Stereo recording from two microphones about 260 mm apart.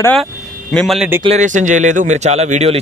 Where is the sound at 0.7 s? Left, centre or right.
Centre.